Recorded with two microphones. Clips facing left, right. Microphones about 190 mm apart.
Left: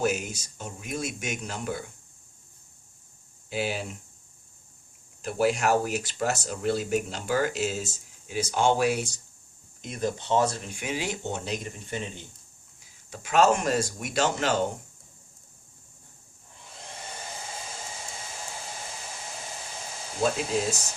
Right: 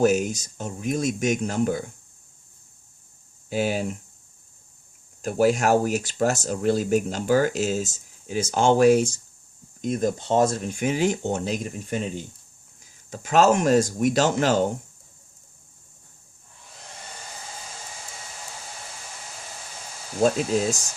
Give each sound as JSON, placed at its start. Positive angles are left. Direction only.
{"t": 0.0, "sound": "speech", "side_deg": -45}
{"t": 3.5, "sound": "speech", "side_deg": -45}
{"t": 5.2, "sound": "speech", "side_deg": -45}